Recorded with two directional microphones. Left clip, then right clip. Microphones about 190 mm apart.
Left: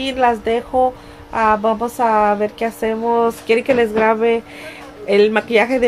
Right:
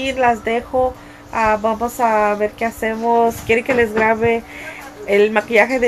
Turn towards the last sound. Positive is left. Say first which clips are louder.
# right 1 dB
turn(degrees=20)  # may be behind; listen again after turning